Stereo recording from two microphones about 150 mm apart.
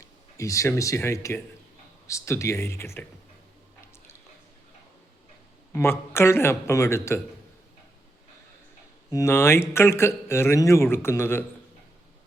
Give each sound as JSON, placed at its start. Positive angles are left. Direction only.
{"t": 0.3, "sound": "speech", "side_deg": 20}
{"t": 5.7, "sound": "speech", "side_deg": 15}
{"t": 9.1, "sound": "speech", "side_deg": 15}